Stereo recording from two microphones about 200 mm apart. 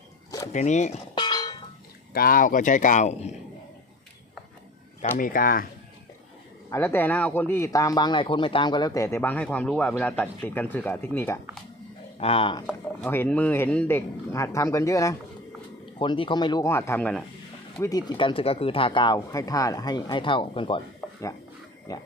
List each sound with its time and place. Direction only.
0.3 s a sound: 15° left (ahead or behind)
0.5 s speech: 35° left (ahead or behind)
1.1 s a sound: 20° left (ahead or behind)
2.1 s speech: 45° left (ahead or behind)
5.1 s speech: 45° left (ahead or behind)
6.7 s speech: 10° left (ahead or behind)
12.2 s speech: 30° left (ahead or behind)
12.6 s speech: 10° left (ahead or behind)
17.7 s speech: 15° left (ahead or behind)